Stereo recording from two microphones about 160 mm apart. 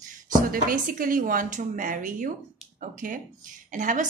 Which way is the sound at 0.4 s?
60° right (ahead or behind).